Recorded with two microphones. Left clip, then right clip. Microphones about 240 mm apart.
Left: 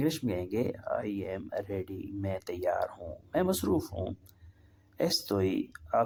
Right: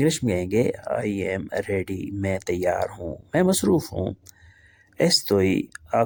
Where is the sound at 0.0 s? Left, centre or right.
Right.